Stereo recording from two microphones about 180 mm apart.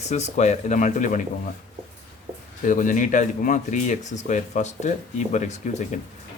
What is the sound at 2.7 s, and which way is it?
Speech, 45° left (ahead or behind).